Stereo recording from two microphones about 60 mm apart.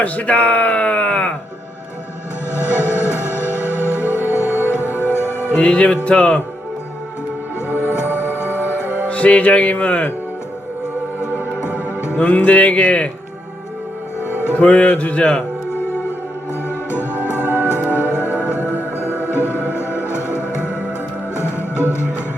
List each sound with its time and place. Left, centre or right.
0.0 s speech: left
2.6 s music: left
5.5 s speech: centre
7.7 s music: left
9.0 s speech: left
11.9 s music: left
12.2 s speech: left
14.6 s speech: left
16.6 s music: left
18.2 s music: right
18.4 s music: left